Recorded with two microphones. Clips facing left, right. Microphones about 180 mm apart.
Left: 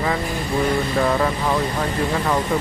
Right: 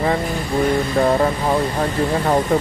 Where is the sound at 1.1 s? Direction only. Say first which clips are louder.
Right 3 dB; 30° right (ahead or behind).